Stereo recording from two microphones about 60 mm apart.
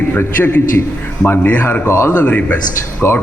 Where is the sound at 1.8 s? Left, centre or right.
Left.